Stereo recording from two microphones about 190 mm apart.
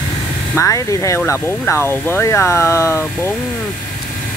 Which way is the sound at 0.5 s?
15° left (ahead or behind).